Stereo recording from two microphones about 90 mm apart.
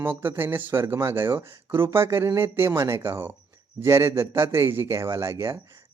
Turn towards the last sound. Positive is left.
turn(degrees=-30)  # may be behind; listen again after turning